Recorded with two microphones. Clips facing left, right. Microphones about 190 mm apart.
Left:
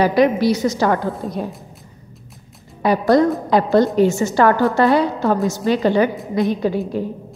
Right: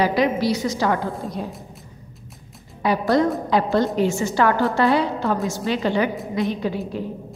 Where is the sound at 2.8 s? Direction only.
45° left (ahead or behind).